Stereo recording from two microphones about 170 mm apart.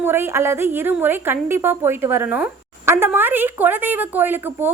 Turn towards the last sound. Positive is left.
turn(degrees=-10)  # may be behind; listen again after turning